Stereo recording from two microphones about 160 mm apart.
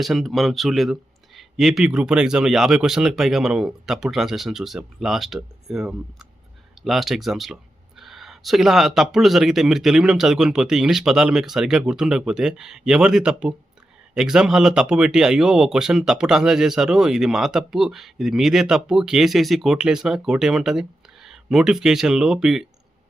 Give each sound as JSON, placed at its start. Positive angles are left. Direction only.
{"t": 0.0, "sound": "speech", "side_deg": 0}